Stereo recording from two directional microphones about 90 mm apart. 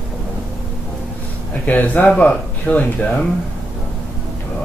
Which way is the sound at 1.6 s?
20° left (ahead or behind).